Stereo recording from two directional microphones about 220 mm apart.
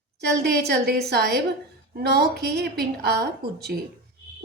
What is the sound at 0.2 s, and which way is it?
A woman's voice, 45° right (ahead or behind).